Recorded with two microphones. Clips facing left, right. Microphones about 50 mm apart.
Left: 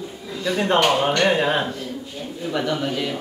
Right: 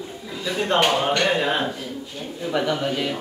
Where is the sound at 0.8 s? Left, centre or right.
Centre.